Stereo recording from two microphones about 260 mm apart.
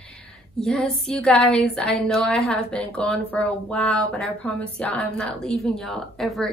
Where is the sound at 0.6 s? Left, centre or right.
Centre.